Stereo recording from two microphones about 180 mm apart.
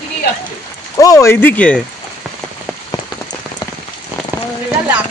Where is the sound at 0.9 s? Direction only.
20° left (ahead or behind).